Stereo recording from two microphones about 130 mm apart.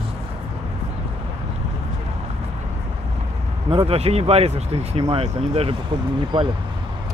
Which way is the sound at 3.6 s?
50° right (ahead or behind).